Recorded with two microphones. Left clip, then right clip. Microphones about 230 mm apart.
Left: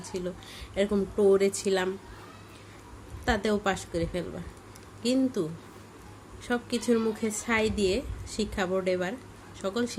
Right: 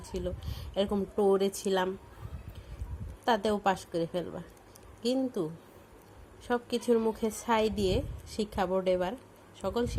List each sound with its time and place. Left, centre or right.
0.1 s a woman's voice: centre
3.2 s a woman's voice: centre
6.5 s a woman's voice: centre